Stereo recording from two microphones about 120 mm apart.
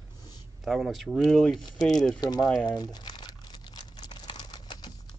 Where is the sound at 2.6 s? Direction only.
35° left (ahead or behind).